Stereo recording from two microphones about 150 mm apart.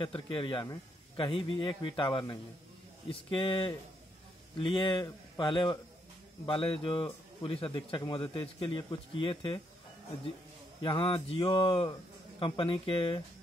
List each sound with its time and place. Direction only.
0.0 s speech: 35° left (ahead or behind)
10.8 s speech: 35° left (ahead or behind)